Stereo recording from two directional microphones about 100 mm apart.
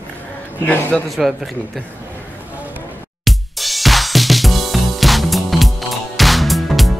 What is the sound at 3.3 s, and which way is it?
Music, centre (ahead or behind).